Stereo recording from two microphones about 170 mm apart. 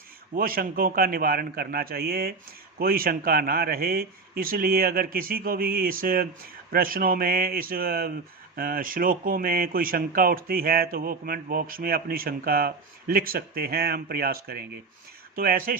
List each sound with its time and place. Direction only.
0.3 s speech: 60° right (ahead or behind)